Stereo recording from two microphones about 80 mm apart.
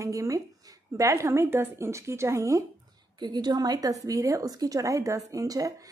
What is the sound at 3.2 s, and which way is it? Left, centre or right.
A woman's voice, right.